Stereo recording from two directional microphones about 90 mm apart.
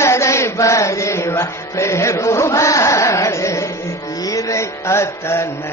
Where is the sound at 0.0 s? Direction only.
30° left (ahead or behind).